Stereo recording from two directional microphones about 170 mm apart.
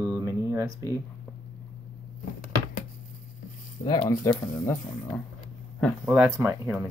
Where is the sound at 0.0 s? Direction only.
20° right (ahead or behind).